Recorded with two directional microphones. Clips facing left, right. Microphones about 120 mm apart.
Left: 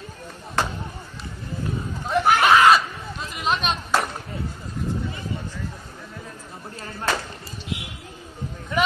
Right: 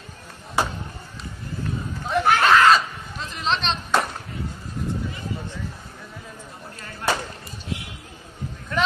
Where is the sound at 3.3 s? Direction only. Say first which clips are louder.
Left 1 dB; 10° left (ahead or behind).